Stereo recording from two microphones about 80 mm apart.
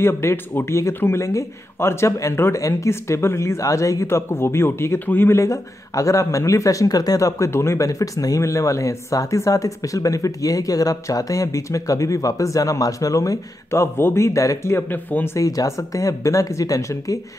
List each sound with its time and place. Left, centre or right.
0.0 s speech: left
5.4 s speech: left
15.3 s speech: left